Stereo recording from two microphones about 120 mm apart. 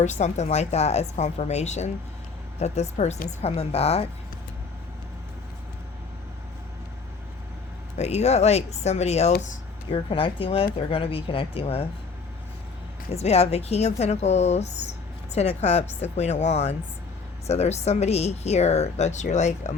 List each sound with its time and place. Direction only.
0.0 s a woman's voice: 80° left; by 4.0 s 60° left (ahead or behind)
7.9 s speech: 65° left (ahead or behind)
9.9 s speech: 45° left (ahead or behind)
13.1 s speech: 60° left (ahead or behind)